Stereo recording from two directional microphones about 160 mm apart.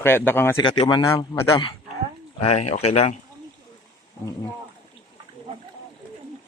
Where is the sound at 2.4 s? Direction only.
40° left (ahead or behind).